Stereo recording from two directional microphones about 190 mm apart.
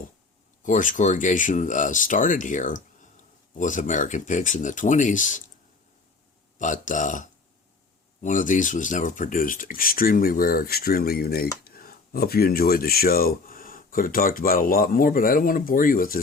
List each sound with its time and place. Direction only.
0.6 s speech: 45° left (ahead or behind)
6.6 s speech: 40° left (ahead or behind)